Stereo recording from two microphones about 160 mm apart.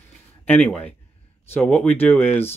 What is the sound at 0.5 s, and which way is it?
Speech, 10° left (ahead or behind).